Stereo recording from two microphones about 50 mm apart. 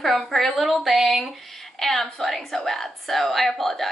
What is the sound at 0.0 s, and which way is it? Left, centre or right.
A woman's voice, centre.